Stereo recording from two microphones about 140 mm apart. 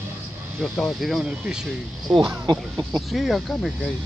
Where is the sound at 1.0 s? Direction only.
Centre (ahead or behind).